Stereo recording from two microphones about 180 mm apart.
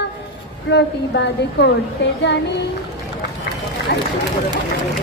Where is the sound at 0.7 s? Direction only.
75° left (ahead or behind).